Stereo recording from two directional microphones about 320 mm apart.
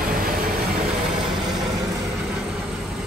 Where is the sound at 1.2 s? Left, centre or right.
Centre.